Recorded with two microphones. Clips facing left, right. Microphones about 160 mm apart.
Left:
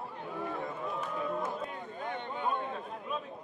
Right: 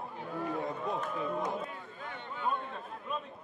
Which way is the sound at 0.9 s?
Centre (ahead or behind).